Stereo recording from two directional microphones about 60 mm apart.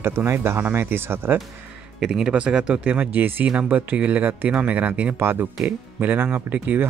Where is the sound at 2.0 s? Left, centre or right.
Centre.